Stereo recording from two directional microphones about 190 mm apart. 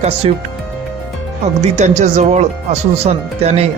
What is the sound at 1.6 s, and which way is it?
Speech, 35° right (ahead or behind).